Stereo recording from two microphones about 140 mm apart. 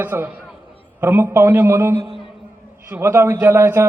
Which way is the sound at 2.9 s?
20° right (ahead or behind).